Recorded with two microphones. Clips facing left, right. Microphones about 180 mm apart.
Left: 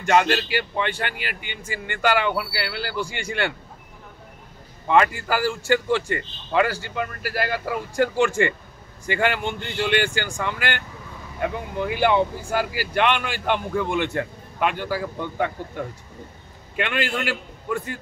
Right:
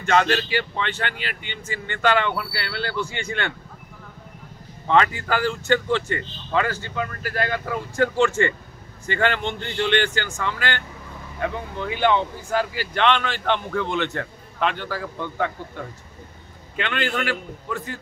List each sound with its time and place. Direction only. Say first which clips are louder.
0.0 s speech: left 1 dB; 10° left (ahead or behind)
4.8 s speech: left 1 dB; 10° left (ahead or behind)
16.7 s speech: even; 10° left (ahead or behind)